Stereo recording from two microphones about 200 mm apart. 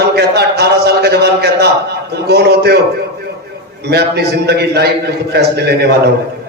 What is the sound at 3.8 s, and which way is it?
A man's voice, 55° right (ahead or behind).